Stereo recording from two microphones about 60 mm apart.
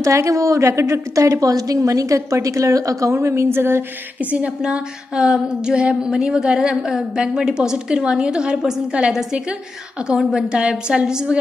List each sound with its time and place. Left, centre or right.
0.0 s a woman's voice: right
0.7 s a woman's voice: right
1.1 s a woman's voice: right
3.2 s a woman's voice: right
4.2 s a sound: right
4.6 s speech: centre